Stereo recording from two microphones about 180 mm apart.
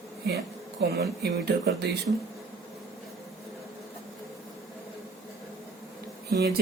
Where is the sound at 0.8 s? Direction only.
65° right (ahead or behind).